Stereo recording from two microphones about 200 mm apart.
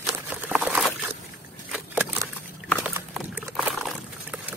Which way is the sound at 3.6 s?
5° right (ahead or behind).